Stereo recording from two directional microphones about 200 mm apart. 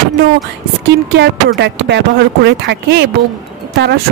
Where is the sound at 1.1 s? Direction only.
60° right (ahead or behind).